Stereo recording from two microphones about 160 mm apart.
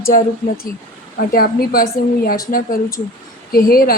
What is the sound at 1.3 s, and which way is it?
Speech, 65° left (ahead or behind).